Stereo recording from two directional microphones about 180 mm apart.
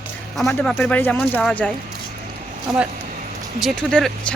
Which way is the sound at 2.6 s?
5° right (ahead or behind).